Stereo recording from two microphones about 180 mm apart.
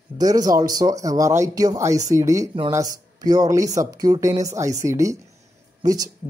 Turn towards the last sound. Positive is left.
turn(degrees=-20)  # may be behind; listen again after turning